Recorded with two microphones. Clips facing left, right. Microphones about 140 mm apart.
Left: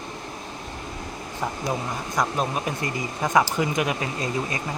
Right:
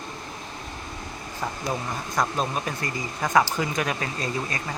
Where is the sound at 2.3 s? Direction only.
15° left (ahead or behind).